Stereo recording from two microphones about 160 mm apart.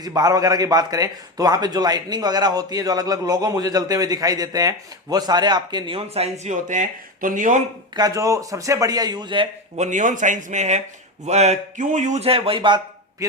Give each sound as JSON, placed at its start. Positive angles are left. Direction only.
{"t": 0.0, "sound": "a man's voice", "side_deg": -25}
{"t": 7.9, "sound": "a man's voice", "side_deg": -20}
{"t": 9.7, "sound": "speech", "side_deg": -50}